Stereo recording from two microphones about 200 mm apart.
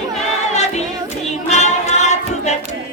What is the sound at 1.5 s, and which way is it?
Music, 35° left (ahead or behind).